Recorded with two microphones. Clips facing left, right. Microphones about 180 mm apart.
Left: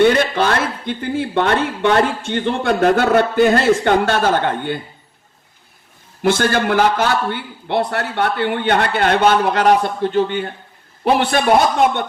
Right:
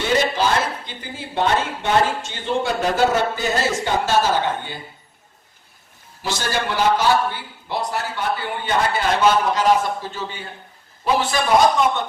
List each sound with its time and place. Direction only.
0.0 s speech: 60° left (ahead or behind)
6.2 s speech: 55° left (ahead or behind)